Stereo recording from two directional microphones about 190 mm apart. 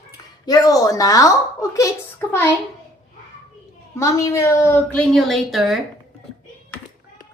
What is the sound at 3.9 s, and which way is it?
A woman's voice, 15° left (ahead or behind).